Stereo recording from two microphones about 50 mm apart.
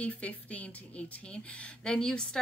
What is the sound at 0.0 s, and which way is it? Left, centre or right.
A woman's voice, left.